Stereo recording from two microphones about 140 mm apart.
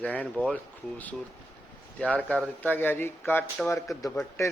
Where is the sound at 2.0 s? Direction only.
10° left (ahead or behind).